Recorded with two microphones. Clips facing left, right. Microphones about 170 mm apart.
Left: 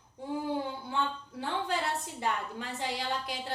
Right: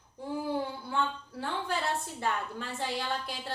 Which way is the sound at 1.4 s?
15° left (ahead or behind).